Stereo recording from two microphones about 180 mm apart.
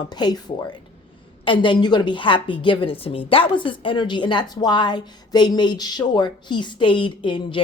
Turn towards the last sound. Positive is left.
turn(degrees=30)  # may be behind; listen again after turning